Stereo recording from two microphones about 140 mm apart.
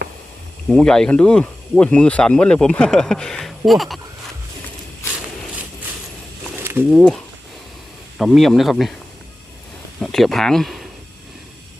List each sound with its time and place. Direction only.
0.7 s speech: 5° left (ahead or behind)
6.6 s a sound: 15° right (ahead or behind)
8.2 s speech: centre (ahead or behind)
10.0 s speech: centre (ahead or behind)